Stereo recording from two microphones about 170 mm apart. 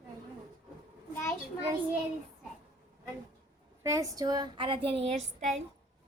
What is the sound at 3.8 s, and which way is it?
Speech, 20° right (ahead or behind).